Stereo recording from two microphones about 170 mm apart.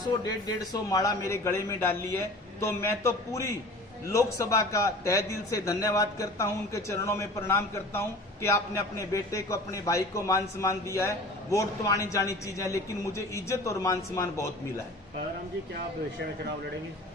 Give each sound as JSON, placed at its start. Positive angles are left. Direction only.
{"t": 0.6, "sound": "a man's voice", "side_deg": 20}